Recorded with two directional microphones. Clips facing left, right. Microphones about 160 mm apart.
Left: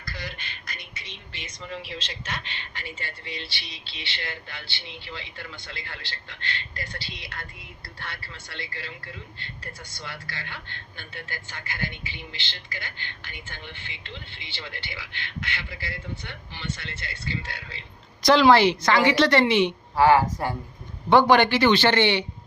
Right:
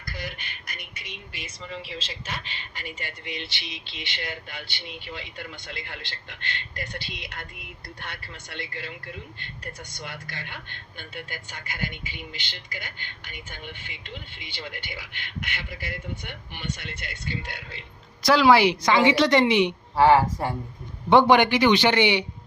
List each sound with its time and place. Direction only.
0.0 s a sound: 15° right (ahead or behind)
1.6 s speech: centre (ahead or behind); by 8.9 s 20° right (ahead or behind)
9.9 s speech: 20° right (ahead or behind)
18.2 s speech: 5° right (ahead or behind)
21.1 s speech: 20° right (ahead or behind)